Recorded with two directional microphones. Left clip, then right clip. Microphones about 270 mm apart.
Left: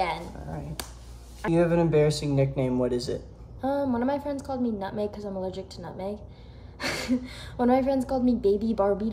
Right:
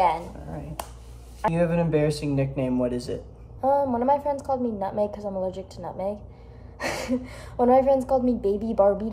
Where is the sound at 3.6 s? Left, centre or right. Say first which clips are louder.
Right 6 dB; centre.